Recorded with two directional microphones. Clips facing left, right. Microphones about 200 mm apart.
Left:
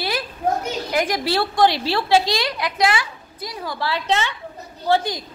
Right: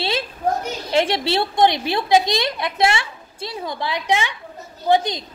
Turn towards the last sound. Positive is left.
turn(degrees=-20)  # may be behind; listen again after turning